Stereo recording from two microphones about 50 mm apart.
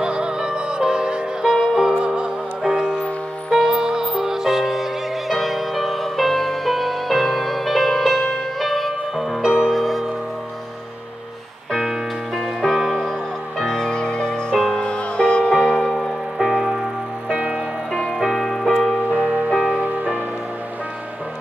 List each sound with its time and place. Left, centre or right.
0.0 s music: centre
9.4 s music: centre
9.7 s music: centre
11.7 s music: centre
13.6 s music: centre
15.6 s music: centre
17.3 s music: centre
18.1 s music: centre
19.1 s music: centre
19.8 s music: right